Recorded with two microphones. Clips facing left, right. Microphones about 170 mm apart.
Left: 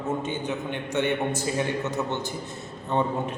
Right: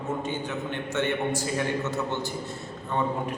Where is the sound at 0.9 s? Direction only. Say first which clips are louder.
Left 2 dB; 15° left (ahead or behind).